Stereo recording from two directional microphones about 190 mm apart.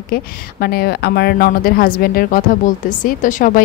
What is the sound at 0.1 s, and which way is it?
A woman's voice, 55° left (ahead or behind).